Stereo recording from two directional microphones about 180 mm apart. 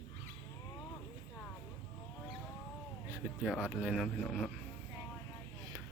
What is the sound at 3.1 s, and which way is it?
Speech, 5° right (ahead or behind).